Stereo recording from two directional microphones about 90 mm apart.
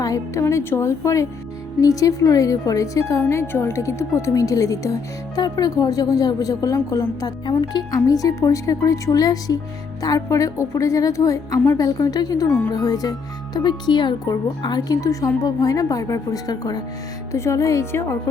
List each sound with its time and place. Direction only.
0.0 s speech: 40° left (ahead or behind)
7.4 s speech: 55° left (ahead or behind); by 11.9 s 35° left (ahead or behind)
11.9 s speech: 45° left (ahead or behind)
17.3 s speech: 30° left (ahead or behind)